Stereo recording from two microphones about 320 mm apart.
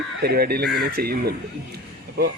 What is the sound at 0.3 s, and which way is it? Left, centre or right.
A man's voice, right.